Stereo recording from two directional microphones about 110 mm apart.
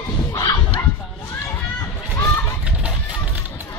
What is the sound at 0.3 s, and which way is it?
Dog, 30° left (ahead or behind).